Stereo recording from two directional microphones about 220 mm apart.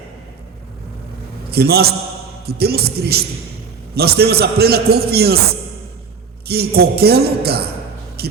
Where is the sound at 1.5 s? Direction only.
45° right (ahead or behind).